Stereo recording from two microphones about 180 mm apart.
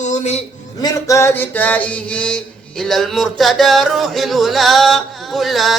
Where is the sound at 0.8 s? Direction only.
20° left (ahead or behind).